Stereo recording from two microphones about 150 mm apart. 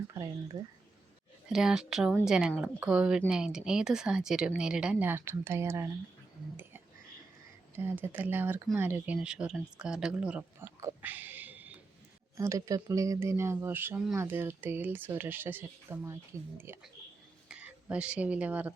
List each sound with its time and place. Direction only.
0.5 s speech: 25° right (ahead or behind)
1.5 s speech: 5° right (ahead or behind)
7.8 s speech: 15° right (ahead or behind)
10.8 s a sound: 15° right (ahead or behind)
12.4 s speech: 20° right (ahead or behind)